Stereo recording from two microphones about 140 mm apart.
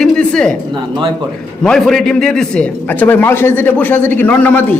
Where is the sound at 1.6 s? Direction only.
5° left (ahead or behind).